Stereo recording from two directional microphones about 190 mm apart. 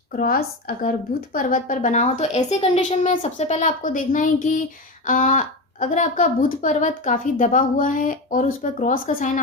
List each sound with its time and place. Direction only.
0.2 s a woman's voice: 50° left (ahead or behind)